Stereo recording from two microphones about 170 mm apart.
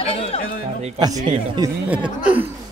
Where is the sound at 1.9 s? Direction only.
10° right (ahead or behind).